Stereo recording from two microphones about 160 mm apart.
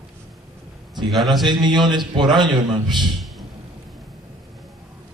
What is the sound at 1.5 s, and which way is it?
A man's voice, 30° right (ahead or behind).